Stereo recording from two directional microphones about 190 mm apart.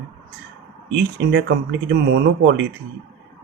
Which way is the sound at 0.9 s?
70° right (ahead or behind).